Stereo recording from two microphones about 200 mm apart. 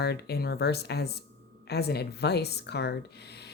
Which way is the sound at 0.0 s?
55° left (ahead or behind).